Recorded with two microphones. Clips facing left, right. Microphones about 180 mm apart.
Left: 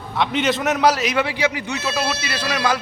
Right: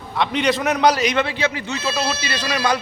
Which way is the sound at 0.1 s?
Centre (ahead or behind).